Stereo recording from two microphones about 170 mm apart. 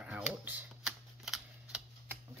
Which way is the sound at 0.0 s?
10° right (ahead or behind).